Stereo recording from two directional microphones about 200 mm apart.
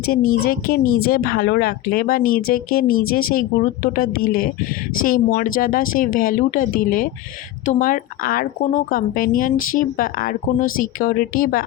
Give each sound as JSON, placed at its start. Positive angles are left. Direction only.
{"t": 0.4, "sound": "speech", "side_deg": 50}